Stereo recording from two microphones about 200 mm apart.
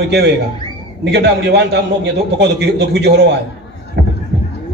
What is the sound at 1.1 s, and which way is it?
A man's voice, 55° right (ahead or behind).